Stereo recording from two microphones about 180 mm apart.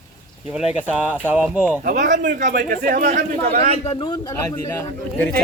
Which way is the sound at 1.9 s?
45° right (ahead or behind).